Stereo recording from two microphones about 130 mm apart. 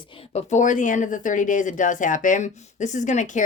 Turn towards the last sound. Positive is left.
turn(degrees=70)  # may be behind; listen again after turning